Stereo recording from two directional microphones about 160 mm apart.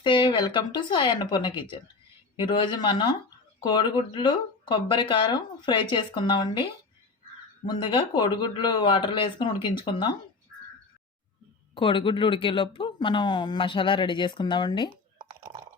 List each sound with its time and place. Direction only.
0.0 s speech: 30° left (ahead or behind)
7.7 s speech: 30° left (ahead or behind)
11.7 s speech: 30° left (ahead or behind)